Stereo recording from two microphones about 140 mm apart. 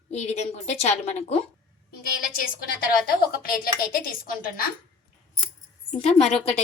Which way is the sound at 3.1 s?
90° left.